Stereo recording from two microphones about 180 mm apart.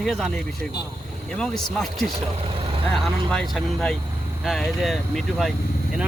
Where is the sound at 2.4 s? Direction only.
30° right (ahead or behind).